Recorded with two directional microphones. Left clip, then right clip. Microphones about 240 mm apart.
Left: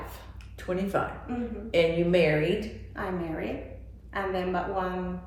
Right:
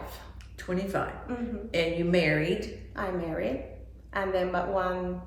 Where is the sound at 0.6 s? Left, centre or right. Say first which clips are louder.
Left 2 dB; centre.